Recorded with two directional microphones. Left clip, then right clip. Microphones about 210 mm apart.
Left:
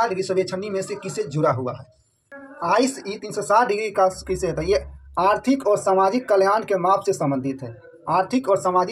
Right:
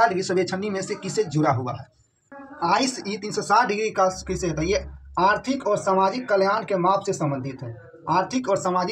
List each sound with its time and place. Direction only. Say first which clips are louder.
0.0 s speech: right 1 dB; 5° left (ahead or behind)